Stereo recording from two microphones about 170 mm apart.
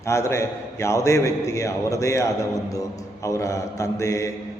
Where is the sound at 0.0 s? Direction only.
15° left (ahead or behind).